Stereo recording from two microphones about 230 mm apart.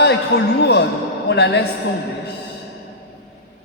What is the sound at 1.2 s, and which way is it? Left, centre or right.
Speech, left.